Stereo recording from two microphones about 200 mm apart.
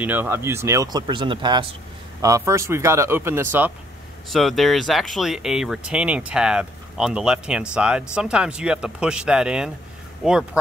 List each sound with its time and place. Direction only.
0.0 s speech: 10° right (ahead or behind)
4.3 s speech: centre (ahead or behind)